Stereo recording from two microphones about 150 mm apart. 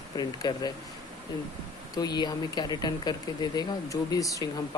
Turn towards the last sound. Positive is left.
turn(degrees=20)  # may be behind; listen again after turning